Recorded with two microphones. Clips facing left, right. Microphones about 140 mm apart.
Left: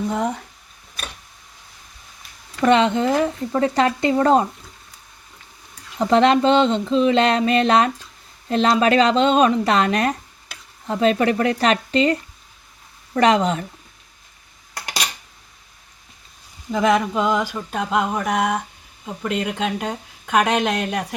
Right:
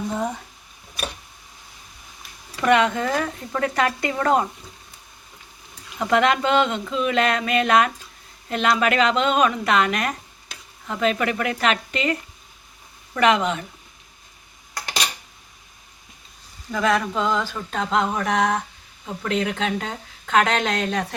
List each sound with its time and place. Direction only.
2.6 s speech: 30° left (ahead or behind)
6.0 s a woman's voice: 30° left (ahead or behind)
13.1 s a woman's voice: 35° left (ahead or behind)
16.7 s a woman's voice: 20° left (ahead or behind)